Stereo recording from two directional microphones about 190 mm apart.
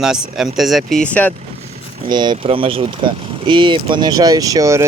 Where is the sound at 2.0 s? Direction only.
25° right (ahead or behind).